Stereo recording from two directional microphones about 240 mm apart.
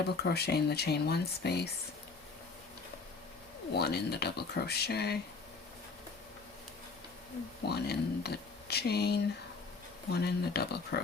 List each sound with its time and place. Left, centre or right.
0.2 s speech: left
3.8 s speech: left
7.6 s speech: left